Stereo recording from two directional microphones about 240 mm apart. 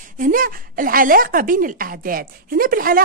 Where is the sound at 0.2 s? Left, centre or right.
Right.